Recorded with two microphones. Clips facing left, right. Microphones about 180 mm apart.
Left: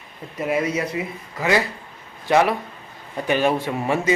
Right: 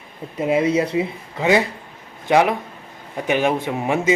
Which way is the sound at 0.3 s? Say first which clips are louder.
Right 5 dB; 25° right (ahead or behind).